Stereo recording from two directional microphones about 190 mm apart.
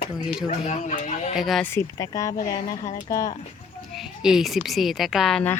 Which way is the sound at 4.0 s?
Centre (ahead or behind).